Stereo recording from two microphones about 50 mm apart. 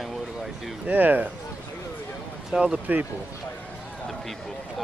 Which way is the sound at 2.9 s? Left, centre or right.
Right.